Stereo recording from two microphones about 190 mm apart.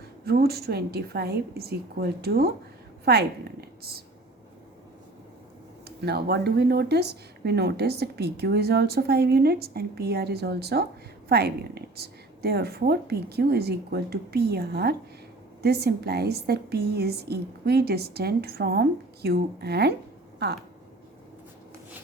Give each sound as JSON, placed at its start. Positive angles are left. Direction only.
{"t": 0.3, "sound": "a woman's voice", "side_deg": -55}
{"t": 6.1, "sound": "speech", "side_deg": -55}